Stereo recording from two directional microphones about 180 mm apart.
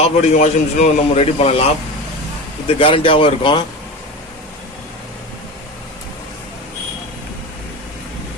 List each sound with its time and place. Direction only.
0.0 s a man's voice: 40° left (ahead or behind)
2.6 s speech: 30° left (ahead or behind)